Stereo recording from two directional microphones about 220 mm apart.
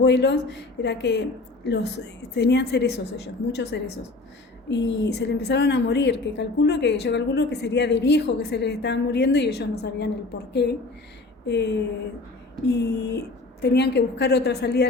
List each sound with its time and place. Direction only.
0.0 s a woman's voice: 50° left (ahead or behind)